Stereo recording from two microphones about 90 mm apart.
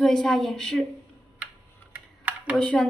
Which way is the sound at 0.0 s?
5° left (ahead or behind).